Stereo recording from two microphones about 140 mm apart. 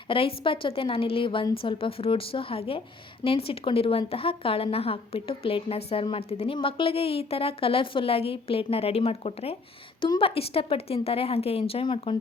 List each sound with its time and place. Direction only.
0.1 s a woman's voice: 40° left (ahead or behind)